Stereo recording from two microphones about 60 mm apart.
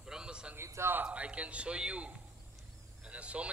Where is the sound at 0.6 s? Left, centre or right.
Right.